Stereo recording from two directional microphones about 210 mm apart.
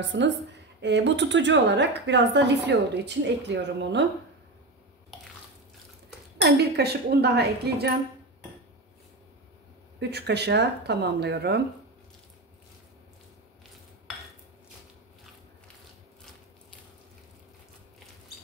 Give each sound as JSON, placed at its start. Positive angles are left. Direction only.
{"t": 0.0, "sound": "a woman's voice", "side_deg": -55}
{"t": 6.4, "sound": "speech", "side_deg": -50}
{"t": 9.9, "sound": "speech", "side_deg": -55}